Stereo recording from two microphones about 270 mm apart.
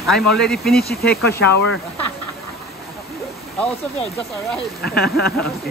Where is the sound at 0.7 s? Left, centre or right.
Left.